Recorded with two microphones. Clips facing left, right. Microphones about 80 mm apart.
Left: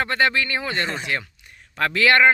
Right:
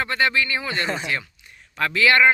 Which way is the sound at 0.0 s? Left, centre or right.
Left.